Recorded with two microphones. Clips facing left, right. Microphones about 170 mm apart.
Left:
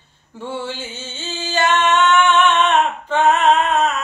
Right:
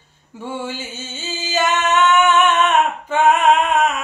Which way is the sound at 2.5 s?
10° right (ahead or behind).